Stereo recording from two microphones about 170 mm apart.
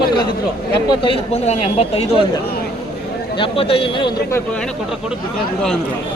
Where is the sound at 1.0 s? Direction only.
35° left (ahead or behind).